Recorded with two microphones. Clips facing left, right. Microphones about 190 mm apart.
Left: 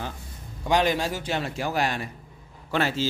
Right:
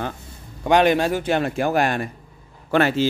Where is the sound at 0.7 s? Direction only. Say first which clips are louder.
Right 6 dB; 60° right (ahead or behind).